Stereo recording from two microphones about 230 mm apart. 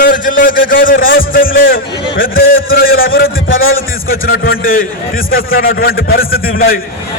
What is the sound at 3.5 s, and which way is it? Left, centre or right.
Speech, left.